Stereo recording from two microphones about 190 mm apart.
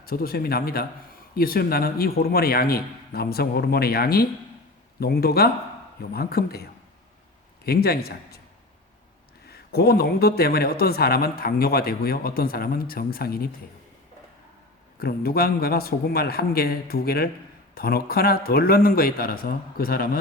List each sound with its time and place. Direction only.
0.0 s a man's voice: 50° left (ahead or behind)
9.5 s speech: 55° left (ahead or behind)
14.9 s speech: 55° left (ahead or behind)